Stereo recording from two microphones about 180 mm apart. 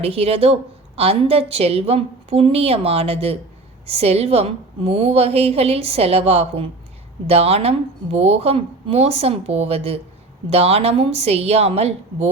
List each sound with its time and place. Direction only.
0.0 s a woman's voice: 35° right (ahead or behind)